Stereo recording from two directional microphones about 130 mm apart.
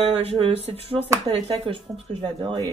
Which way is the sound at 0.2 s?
50° right (ahead or behind).